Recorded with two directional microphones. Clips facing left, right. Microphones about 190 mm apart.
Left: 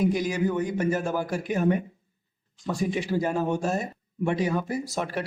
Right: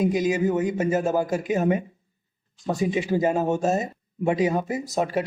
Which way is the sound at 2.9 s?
20° right (ahead or behind).